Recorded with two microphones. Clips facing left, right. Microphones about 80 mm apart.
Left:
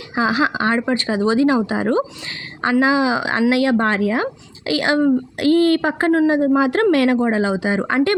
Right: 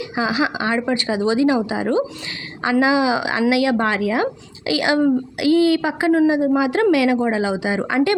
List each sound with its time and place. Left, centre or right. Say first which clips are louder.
0.2 s a woman's voice: left 3 dB; left
5.5 s speech: left 1 dB; centre
5.7 s a woman's voice: left 1 dB; left